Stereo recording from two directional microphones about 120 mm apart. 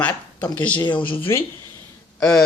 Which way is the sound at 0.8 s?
40° left (ahead or behind).